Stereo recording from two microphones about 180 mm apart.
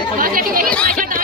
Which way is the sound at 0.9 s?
50° right (ahead or behind).